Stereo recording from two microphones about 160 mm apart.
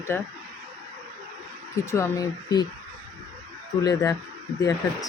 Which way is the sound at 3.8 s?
20° left (ahead or behind).